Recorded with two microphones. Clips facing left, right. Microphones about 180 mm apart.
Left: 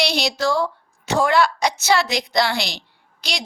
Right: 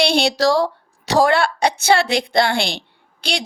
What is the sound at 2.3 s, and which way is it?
Speech, 55° right (ahead or behind).